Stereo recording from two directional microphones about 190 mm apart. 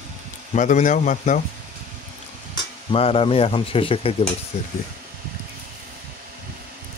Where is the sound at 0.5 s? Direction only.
40° left (ahead or behind).